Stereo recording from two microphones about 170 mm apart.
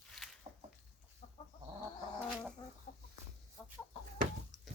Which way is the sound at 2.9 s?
45° left (ahead or behind).